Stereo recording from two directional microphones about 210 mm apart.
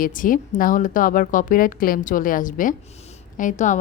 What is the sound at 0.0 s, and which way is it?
Speech, 40° left (ahead or behind).